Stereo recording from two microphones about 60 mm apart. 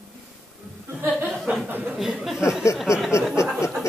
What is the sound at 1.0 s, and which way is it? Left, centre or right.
Speech, right.